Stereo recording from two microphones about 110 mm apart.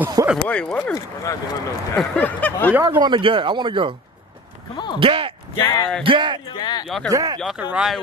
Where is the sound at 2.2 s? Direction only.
15° left (ahead or behind).